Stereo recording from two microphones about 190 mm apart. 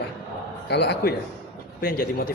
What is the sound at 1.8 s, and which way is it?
Speech, 50° left (ahead or behind).